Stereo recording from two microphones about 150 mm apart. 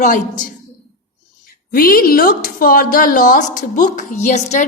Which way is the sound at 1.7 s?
75° left (ahead or behind).